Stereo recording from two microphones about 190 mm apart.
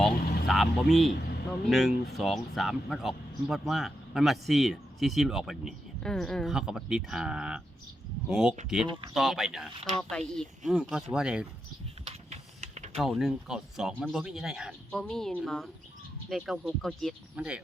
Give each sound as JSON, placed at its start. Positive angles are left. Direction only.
{"t": 0.0, "sound": "vehicle", "side_deg": 0}
{"t": 1.7, "sound": "speech", "side_deg": 0}
{"t": 12.0, "sound": "a sound", "side_deg": -35}
{"t": 13.0, "sound": "speech", "side_deg": 0}